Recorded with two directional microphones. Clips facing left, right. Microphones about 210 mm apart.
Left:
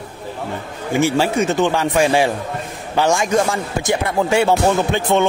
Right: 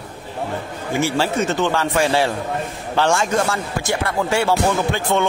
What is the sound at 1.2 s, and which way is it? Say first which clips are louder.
Speech: left 3 dB; 15° left (ahead or behind).